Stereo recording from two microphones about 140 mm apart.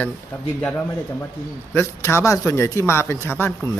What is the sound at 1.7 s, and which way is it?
A man's voice, 20° left (ahead or behind).